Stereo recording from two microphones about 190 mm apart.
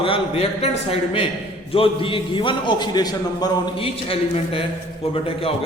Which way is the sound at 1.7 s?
30° left (ahead or behind).